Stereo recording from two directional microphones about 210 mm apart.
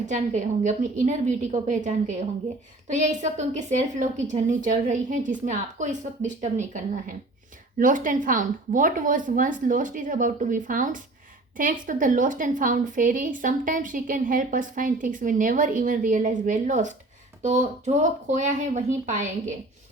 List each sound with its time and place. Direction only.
0.0 s a woman's voice: 35° right (ahead or behind)